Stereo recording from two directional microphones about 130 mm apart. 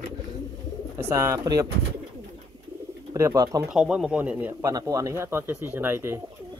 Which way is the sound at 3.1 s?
25° right (ahead or behind).